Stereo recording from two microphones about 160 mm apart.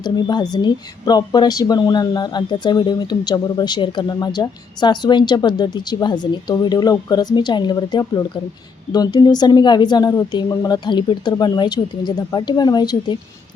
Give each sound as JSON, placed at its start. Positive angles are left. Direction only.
{"t": 0.0, "sound": "speech", "side_deg": 25}